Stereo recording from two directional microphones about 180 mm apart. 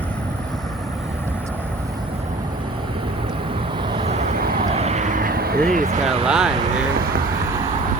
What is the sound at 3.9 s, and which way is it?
Vehicle, 35° right (ahead or behind).